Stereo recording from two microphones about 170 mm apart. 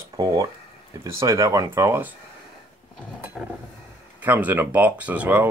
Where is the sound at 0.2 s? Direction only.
20° right (ahead or behind).